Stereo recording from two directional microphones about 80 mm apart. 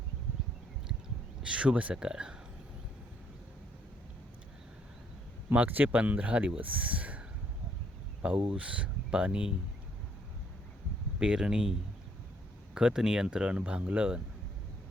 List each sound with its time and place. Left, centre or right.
1.4 s speech: centre
5.5 s speech: right
8.5 s speech: centre
11.2 s speech: centre
12.7 s speech: centre